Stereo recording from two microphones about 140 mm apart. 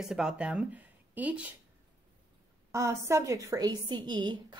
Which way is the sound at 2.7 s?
20° right (ahead or behind).